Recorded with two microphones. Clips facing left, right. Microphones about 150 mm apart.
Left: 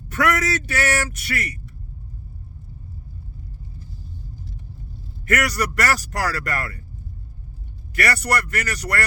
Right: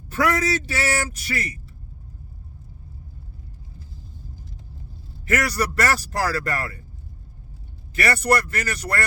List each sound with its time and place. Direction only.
0.1 s speech: 30° right (ahead or behind)
5.3 s speech: 30° right (ahead or behind)
7.9 s speech: 25° right (ahead or behind)